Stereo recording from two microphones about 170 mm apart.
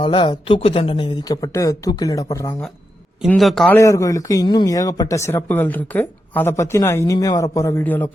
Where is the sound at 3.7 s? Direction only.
20° left (ahead or behind).